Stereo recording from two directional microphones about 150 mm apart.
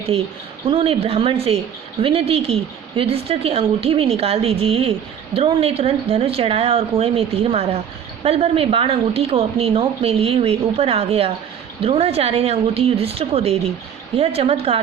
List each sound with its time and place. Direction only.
0.1 s a woman's voice: 40° right (ahead or behind)